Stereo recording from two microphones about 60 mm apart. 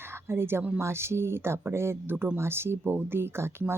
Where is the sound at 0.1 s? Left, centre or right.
Right.